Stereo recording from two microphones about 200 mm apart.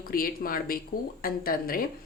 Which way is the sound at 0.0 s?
45° left (ahead or behind).